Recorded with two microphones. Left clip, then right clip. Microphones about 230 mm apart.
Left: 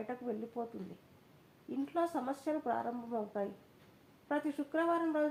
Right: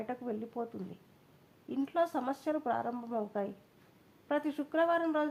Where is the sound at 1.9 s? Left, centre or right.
Right.